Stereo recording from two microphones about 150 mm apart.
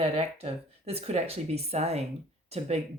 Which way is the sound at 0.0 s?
45° right (ahead or behind).